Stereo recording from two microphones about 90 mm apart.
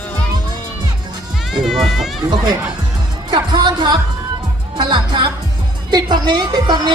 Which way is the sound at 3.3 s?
55° right (ahead or behind).